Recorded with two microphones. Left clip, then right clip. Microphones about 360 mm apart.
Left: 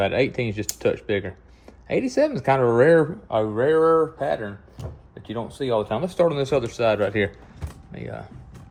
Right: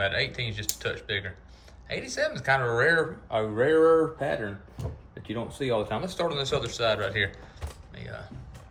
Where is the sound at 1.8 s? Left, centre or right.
Centre.